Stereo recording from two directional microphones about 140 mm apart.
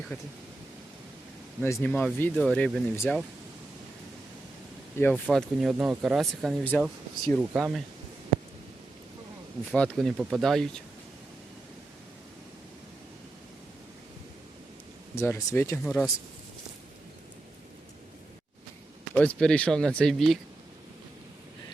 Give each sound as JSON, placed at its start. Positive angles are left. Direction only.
{"t": 0.1, "sound": "speech", "side_deg": 15}
{"t": 1.6, "sound": "speech", "side_deg": 15}
{"t": 4.9, "sound": "speech", "side_deg": 15}
{"t": 5.3, "sound": "speech", "side_deg": 0}
{"t": 9.7, "sound": "speech", "side_deg": 5}
{"t": 15.1, "sound": "speech", "side_deg": 20}
{"t": 19.1, "sound": "speech", "side_deg": 10}